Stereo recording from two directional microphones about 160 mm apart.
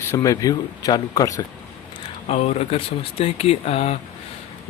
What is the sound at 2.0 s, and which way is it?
Speech, 40° left (ahead or behind).